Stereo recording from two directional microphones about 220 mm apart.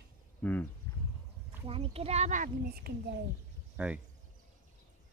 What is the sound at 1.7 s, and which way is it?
A child's voice, 25° right (ahead or behind).